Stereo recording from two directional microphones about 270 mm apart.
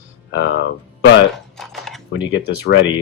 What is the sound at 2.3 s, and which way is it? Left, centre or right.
Speech, left.